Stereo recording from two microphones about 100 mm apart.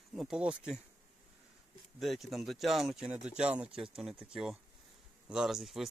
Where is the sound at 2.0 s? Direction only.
Centre (ahead or behind).